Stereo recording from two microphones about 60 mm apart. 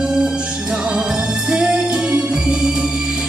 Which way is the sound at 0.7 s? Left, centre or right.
Centre.